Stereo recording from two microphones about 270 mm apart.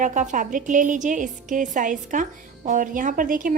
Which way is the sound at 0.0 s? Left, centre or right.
Right.